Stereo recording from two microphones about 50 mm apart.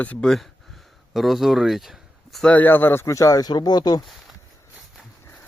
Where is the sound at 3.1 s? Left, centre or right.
Left.